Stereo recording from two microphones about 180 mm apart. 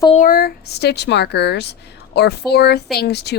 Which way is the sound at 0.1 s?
50° left (ahead or behind).